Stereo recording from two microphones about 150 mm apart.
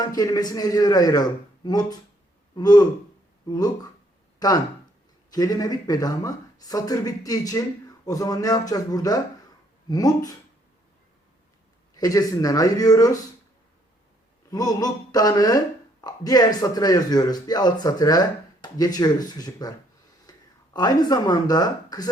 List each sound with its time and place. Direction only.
0.0 s a woman's voice: 25° left (ahead or behind)
11.9 s a woman's voice: 25° left (ahead or behind)
14.5 s a woman's voice: 25° left (ahead or behind)
20.3 s a sound: 25° left (ahead or behind)
20.7 s a woman's voice: 25° left (ahead or behind)